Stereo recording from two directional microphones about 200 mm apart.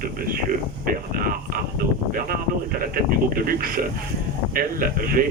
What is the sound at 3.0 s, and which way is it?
Speech, 45° right (ahead or behind).